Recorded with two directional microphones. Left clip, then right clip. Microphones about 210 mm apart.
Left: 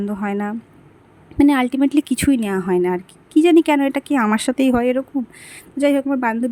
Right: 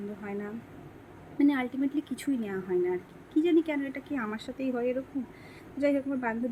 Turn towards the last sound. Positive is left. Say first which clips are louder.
# left 11 dB
turn(degrees=50)  # may be behind; listen again after turning